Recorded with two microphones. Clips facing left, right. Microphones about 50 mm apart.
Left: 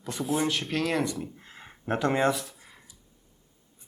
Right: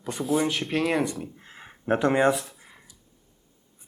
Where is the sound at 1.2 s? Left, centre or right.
Centre.